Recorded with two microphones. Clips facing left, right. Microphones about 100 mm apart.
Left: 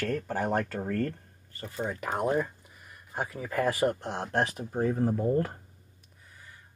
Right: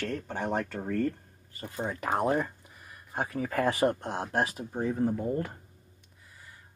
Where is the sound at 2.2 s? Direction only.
30° right (ahead or behind).